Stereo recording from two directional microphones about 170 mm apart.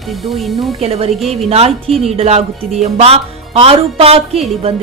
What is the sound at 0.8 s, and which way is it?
Speech, 35° right (ahead or behind).